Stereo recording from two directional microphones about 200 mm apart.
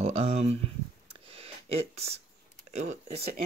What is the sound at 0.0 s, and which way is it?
Speech, 30° right (ahead or behind).